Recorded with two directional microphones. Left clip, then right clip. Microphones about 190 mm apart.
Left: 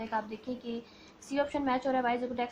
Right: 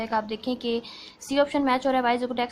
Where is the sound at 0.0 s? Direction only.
25° right (ahead or behind).